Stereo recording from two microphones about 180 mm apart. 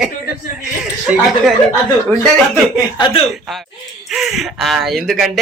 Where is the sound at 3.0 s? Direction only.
30° left (ahead or behind).